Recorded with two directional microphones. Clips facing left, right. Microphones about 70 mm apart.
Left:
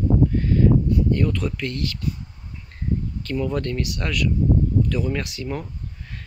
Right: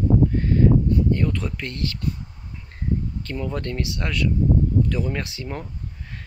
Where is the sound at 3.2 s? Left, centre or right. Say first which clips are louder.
Left 4 dB; right.